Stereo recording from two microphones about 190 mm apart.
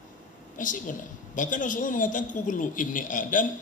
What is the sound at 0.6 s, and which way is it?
A woman's voice, 45° left (ahead or behind).